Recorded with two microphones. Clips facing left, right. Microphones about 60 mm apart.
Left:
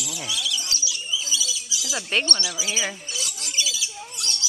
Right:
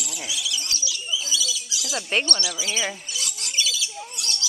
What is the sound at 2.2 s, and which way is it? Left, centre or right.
Speech, left.